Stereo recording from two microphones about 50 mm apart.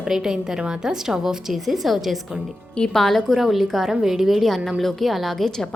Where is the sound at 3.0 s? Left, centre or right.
Centre.